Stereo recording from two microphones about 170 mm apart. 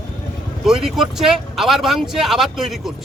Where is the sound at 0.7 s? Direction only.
5° right (ahead or behind).